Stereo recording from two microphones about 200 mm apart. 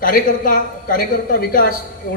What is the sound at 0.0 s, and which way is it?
A man's voice, 45° left (ahead or behind).